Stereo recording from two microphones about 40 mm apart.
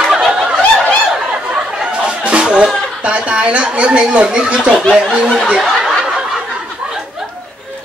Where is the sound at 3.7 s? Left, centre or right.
Right.